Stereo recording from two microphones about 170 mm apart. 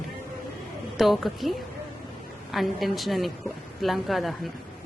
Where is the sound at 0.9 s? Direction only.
Centre (ahead or behind).